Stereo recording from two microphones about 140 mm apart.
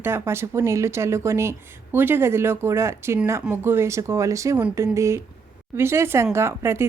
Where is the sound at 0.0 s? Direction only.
15° right (ahead or behind).